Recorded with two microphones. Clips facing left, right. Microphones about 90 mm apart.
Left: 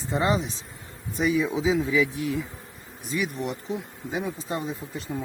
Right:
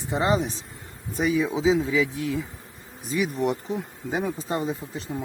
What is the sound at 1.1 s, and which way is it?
Speech, 40° right (ahead or behind).